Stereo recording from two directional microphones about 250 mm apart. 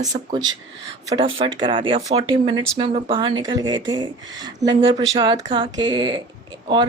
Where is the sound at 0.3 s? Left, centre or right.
Centre.